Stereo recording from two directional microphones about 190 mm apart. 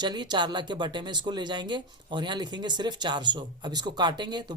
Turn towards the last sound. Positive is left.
turn(degrees=-20)  # may be behind; listen again after turning